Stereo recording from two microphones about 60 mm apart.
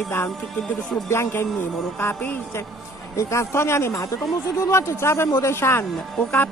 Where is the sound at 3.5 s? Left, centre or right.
Left.